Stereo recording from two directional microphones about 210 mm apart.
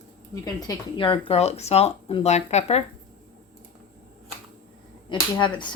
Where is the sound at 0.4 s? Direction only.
20° left (ahead or behind).